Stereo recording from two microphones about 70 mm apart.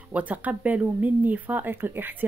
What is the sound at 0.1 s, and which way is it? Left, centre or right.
Speech, right.